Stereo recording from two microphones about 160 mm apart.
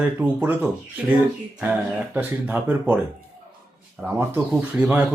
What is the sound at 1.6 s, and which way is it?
A man's voice, 10° right (ahead or behind).